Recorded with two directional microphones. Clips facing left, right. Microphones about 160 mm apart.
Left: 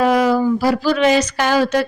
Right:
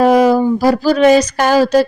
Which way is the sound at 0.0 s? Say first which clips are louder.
Right 5 dB; 45° right (ahead or behind).